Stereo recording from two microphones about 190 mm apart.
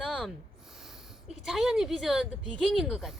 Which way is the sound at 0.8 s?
Centre (ahead or behind).